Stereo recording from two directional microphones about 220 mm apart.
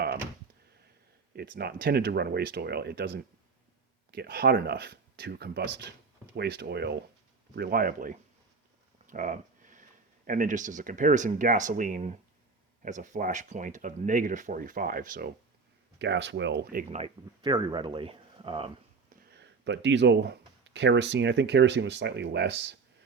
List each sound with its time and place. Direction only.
1.4 s speech: 45° right (ahead or behind)
4.1 s speech: 45° right (ahead or behind)
9.0 s a sound: 35° right (ahead or behind)
10.2 s speech: 35° right (ahead or behind)
16.0 s speech: 55° right (ahead or behind)
17.4 s speech: 20° right (ahead or behind)
19.3 s speech: 50° right (ahead or behind)